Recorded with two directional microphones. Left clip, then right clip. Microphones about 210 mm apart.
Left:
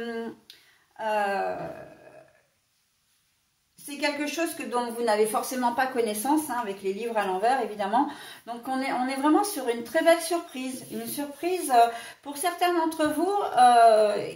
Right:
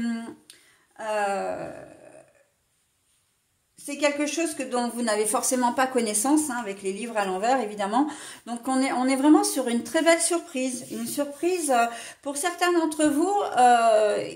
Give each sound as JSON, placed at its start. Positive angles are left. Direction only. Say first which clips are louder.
{"t": 0.9, "sound": "a woman's voice", "louder": "even", "side_deg": -45}
{"t": 3.8, "sound": "a woman's voice", "louder": "right 4 dB", "side_deg": -40}